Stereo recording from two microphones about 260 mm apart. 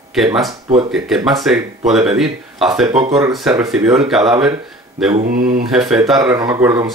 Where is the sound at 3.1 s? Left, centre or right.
Centre.